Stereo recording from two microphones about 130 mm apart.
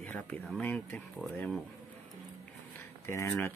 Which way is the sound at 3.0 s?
20° left (ahead or behind).